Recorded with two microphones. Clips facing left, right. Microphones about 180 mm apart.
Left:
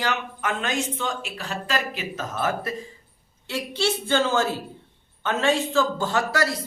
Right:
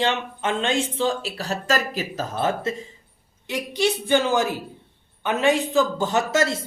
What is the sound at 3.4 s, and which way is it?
A woman's voice, 15° right (ahead or behind).